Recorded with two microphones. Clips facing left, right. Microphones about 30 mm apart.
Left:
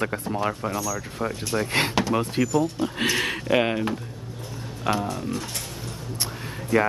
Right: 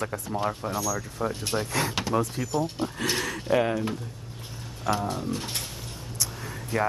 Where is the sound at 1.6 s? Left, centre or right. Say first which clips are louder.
Left 5 dB; left.